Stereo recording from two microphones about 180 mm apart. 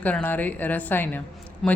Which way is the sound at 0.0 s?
10° left (ahead or behind).